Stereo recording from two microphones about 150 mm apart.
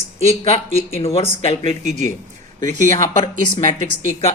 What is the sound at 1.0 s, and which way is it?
Speech, 40° left (ahead or behind).